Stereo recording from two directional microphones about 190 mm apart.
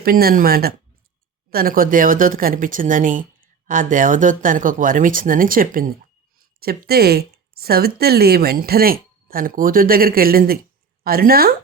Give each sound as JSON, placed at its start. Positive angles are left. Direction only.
{"t": 0.0, "sound": "speech", "side_deg": -55}